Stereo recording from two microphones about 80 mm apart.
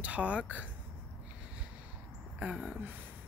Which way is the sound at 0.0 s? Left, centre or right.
Centre.